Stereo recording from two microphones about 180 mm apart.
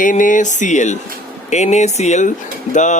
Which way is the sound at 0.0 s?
45° left (ahead or behind).